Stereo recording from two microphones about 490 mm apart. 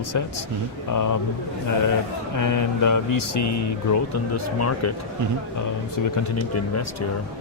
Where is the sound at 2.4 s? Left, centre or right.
Left.